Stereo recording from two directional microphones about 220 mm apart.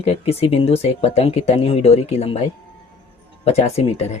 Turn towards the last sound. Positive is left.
turn(degrees=30)  # may be behind; listen again after turning